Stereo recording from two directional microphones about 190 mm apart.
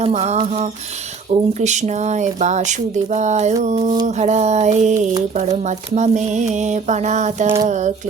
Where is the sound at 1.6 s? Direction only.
40° right (ahead or behind).